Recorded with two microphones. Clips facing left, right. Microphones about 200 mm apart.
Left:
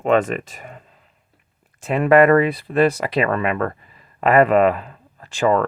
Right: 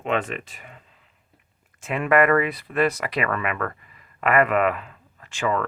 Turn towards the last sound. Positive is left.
turn(degrees=35)  # may be behind; listen again after turning